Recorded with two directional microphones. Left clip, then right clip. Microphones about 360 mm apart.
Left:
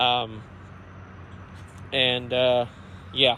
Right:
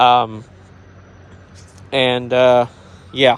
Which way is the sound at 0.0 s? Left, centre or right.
Centre.